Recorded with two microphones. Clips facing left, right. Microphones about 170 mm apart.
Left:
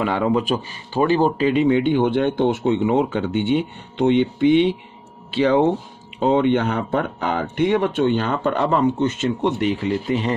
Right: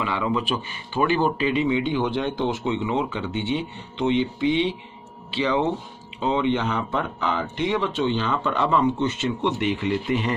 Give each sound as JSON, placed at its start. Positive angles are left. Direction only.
{"t": 0.0, "sound": "speech", "side_deg": 45}